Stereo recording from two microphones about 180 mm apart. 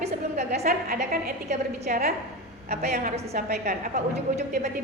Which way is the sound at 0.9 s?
55° right (ahead or behind).